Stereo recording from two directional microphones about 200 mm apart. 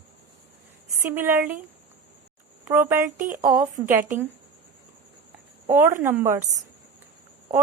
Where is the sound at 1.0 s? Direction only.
10° right (ahead or behind).